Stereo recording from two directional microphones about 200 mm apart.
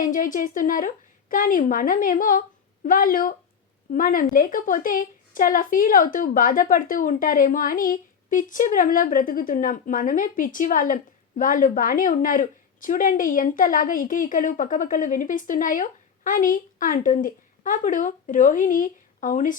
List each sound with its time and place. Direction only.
0.0 s a woman's voice: 40° left (ahead or behind)